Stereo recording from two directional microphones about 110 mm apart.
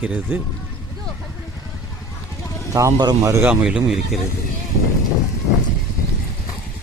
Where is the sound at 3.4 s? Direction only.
5° right (ahead or behind).